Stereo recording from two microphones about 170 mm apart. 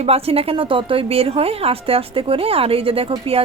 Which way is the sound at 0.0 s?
35° right (ahead or behind).